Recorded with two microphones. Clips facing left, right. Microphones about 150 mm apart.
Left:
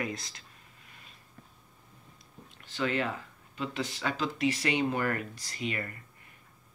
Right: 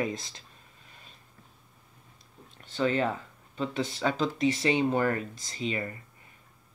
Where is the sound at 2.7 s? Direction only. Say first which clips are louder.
Right 4 dB; 35° right (ahead or behind).